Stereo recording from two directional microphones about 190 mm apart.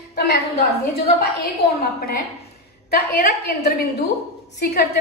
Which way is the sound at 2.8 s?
55° left (ahead or behind).